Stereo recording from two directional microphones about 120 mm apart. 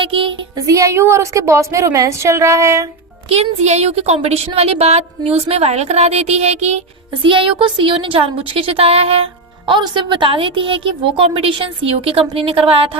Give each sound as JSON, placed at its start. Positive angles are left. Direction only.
{"t": 0.0, "sound": "music", "side_deg": -50}
{"t": 0.5, "sound": "a woman's voice", "side_deg": -30}
{"t": 3.2, "sound": "a woman's voice", "side_deg": -65}
{"t": 7.2, "sound": "a woman's voice", "side_deg": -45}